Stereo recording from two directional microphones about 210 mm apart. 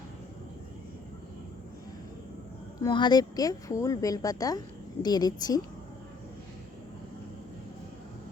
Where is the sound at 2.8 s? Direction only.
20° left (ahead or behind).